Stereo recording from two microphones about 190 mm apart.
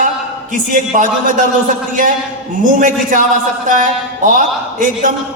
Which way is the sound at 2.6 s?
45° right (ahead or behind).